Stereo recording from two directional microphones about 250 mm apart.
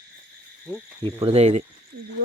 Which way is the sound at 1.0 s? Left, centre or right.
Right.